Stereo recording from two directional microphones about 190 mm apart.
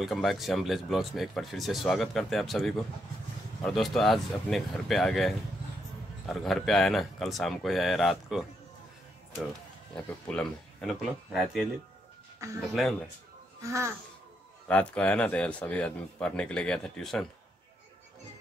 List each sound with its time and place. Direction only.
0.0 s speech: centre (ahead or behind)
10.0 s speech: 5° left (ahead or behind)
13.6 s speech: 15° right (ahead or behind)
14.7 s speech: 5° left (ahead or behind)